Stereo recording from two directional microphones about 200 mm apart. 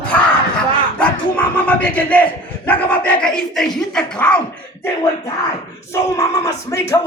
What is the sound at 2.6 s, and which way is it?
Speech, 5° left (ahead or behind).